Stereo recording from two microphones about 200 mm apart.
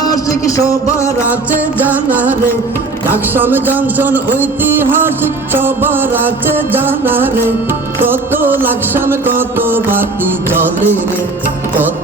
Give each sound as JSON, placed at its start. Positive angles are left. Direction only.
{"t": 0.1, "sound": "a sound", "side_deg": 15}
{"t": 1.5, "sound": "music", "side_deg": -10}
{"t": 3.3, "sound": "music", "side_deg": -10}